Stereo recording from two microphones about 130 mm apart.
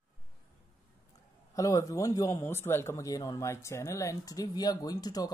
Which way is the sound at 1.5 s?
25° left (ahead or behind).